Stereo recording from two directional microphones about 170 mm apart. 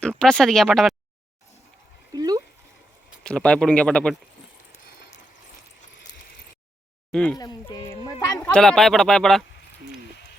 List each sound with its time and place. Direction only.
0.0 s speech: 5° left (ahead or behind)
2.1 s a sound: 20° right (ahead or behind)
3.2 s speech: 5° left (ahead or behind)
7.1 s speech: 5° left (ahead or behind)
7.3 s speech: 25° left (ahead or behind)
8.5 s speech: 5° left (ahead or behind)